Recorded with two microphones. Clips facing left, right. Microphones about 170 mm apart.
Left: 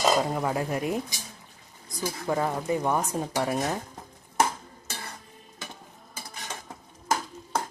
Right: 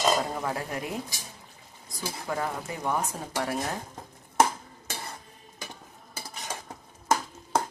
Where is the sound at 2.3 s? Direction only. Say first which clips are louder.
Left 6 dB; 25° left (ahead or behind).